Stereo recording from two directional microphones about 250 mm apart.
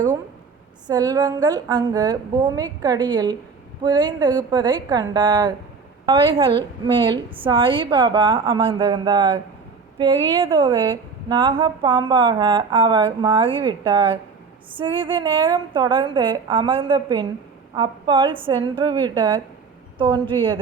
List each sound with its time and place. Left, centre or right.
0.9 s a woman's voice: centre